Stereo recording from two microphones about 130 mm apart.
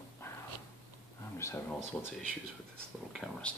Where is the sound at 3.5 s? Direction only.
10° left (ahead or behind).